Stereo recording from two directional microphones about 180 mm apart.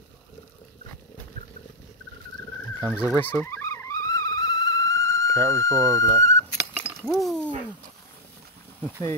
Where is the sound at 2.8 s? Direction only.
10° left (ahead or behind).